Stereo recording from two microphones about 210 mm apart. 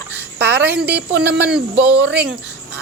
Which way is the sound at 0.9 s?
55° right (ahead or behind).